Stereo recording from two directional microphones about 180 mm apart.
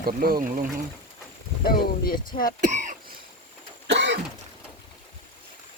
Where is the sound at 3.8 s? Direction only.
75° right (ahead or behind).